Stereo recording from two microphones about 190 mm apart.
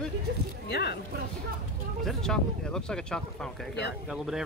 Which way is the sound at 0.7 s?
60° left (ahead or behind).